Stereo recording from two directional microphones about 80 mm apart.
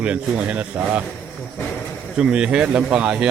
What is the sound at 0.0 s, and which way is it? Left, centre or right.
Speech, centre.